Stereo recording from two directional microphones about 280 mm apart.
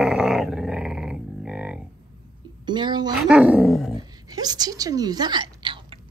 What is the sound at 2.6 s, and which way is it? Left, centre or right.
Speech, centre.